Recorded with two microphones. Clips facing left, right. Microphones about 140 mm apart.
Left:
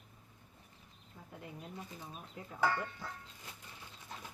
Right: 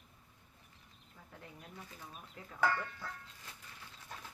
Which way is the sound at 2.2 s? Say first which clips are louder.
Even; 20° left (ahead or behind).